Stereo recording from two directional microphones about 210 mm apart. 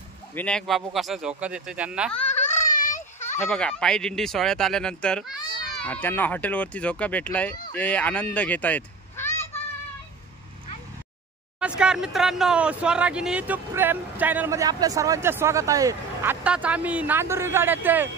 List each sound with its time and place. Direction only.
0.3 s speech: 5° left (ahead or behind)
2.8 s children playing: 35° left (ahead or behind)
3.4 s a child's voice: 5° left (ahead or behind)
11.6 s speech: 5° right (ahead or behind)